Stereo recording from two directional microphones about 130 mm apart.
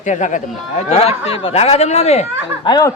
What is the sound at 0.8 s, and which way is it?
Speech, 55° left (ahead or behind).